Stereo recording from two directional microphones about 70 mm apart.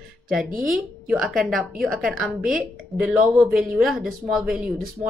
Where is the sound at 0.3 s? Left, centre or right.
Centre.